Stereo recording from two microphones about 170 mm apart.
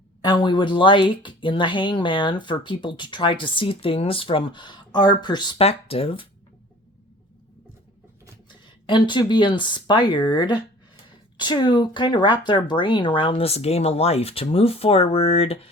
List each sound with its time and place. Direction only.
0.2 s speech: 25° left (ahead or behind)
8.9 s speech: 25° left (ahead or behind)